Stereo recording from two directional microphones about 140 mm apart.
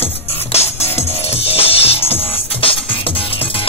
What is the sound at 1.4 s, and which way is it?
Music, 45° left (ahead or behind).